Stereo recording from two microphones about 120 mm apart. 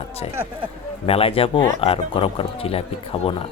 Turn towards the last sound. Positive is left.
turn(degrees=55)  # may be behind; listen again after turning